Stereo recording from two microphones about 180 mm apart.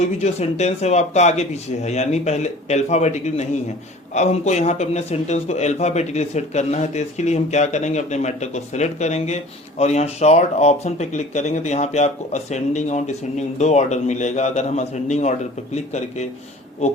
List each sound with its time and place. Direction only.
0.0 s speech: 35° left (ahead or behind)